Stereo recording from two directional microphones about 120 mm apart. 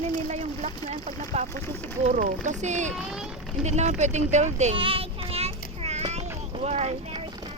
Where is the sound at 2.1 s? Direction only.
85° right.